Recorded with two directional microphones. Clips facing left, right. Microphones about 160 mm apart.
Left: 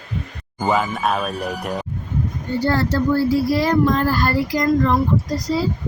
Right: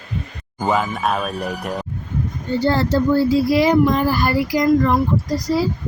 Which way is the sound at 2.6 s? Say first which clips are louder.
Right 2 dB; 25° right (ahead or behind).